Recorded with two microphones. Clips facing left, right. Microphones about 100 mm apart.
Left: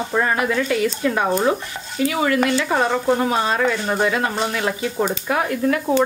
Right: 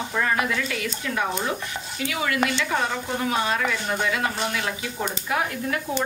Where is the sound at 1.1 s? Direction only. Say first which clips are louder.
Left 5 dB; 45° left (ahead or behind).